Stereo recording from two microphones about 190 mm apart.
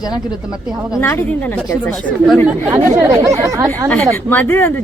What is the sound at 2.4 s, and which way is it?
Speech, 10° right (ahead or behind).